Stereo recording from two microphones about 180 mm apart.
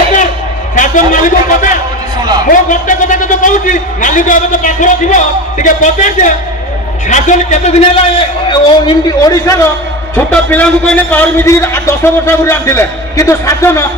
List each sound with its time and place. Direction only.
0.8 s a sound: 45° left (ahead or behind)
2.5 s a man's voice: 45° left (ahead or behind)
8.4 s a man's voice: 25° left (ahead or behind)
10.2 s a man's voice: 10° left (ahead or behind)